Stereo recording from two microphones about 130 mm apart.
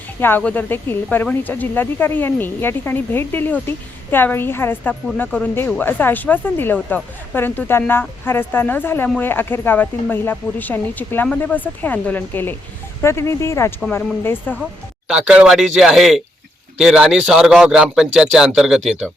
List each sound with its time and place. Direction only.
0.2 s speech: 15° left (ahead or behind)
14.6 s speech: 5° right (ahead or behind)